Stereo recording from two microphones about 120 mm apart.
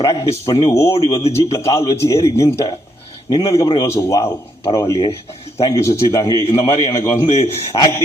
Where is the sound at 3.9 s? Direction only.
25° left (ahead or behind).